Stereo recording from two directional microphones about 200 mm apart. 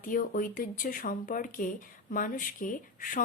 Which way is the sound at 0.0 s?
40° left (ahead or behind).